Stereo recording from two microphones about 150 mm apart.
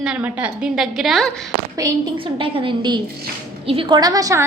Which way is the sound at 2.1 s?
35° right (ahead or behind).